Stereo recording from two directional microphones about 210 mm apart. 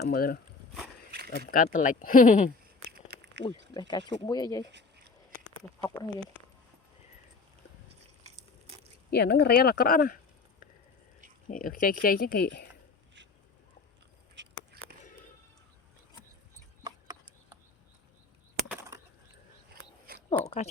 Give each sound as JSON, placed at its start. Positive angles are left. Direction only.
{"t": 0.0, "sound": "speech", "side_deg": 45}
{"t": 1.5, "sound": "speech", "side_deg": 40}
{"t": 2.9, "sound": "a sound", "side_deg": -50}
{"t": 3.8, "sound": "speech", "side_deg": 20}
{"t": 5.8, "sound": "speech", "side_deg": 10}
{"t": 9.0, "sound": "speech", "side_deg": 50}
{"t": 11.4, "sound": "speech", "side_deg": 40}
{"t": 14.3, "sound": "a sound", "side_deg": -50}
{"t": 20.3, "sound": "speech", "side_deg": 30}